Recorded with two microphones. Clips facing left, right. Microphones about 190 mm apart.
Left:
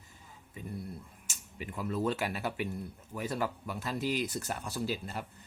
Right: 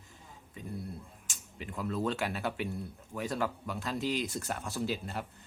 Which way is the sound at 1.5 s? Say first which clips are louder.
Even; 10° left (ahead or behind).